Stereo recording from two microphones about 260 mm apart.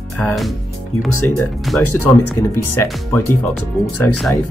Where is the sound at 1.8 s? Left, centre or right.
Left.